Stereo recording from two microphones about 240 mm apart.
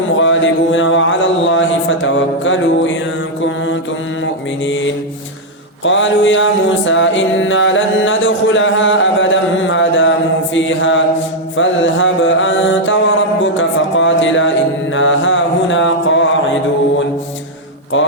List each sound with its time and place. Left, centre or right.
0.2 s music: left
4.6 s music: left
11.5 s mantra: left